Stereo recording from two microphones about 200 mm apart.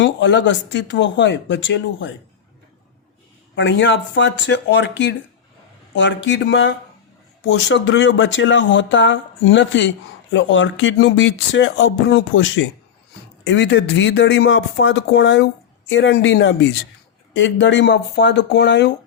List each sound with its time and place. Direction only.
0.0 s speech: 65° left (ahead or behind)
3.5 s speech: 65° left (ahead or behind)